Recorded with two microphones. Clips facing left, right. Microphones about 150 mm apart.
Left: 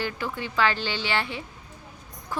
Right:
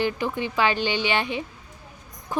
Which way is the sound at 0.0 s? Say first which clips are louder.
Right 5 dB; 20° right (ahead or behind).